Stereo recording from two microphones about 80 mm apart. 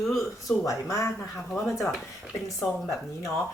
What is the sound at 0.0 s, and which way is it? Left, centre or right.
Speech, centre.